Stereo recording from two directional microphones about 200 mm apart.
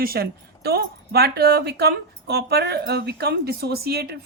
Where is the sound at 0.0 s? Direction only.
50° right (ahead or behind).